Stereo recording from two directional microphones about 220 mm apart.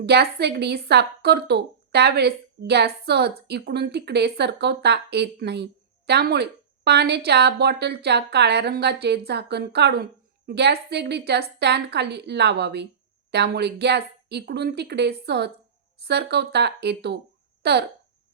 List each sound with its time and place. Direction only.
0.0 s speech: 45° right (ahead or behind)